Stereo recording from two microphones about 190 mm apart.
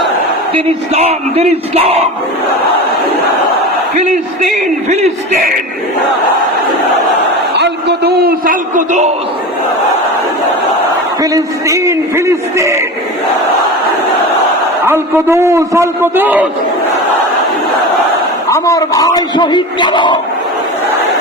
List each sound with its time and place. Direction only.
0.5 s speech: 35° right (ahead or behind)
3.9 s speech: 45° right (ahead or behind)
7.5 s a sound: 60° right (ahead or behind); by 9.0 s 40° right (ahead or behind)
11.2 s a man's voice: 15° right (ahead or behind)
14.8 s a man's voice: 10° right (ahead or behind)
18.4 s a man's voice: 15° left (ahead or behind)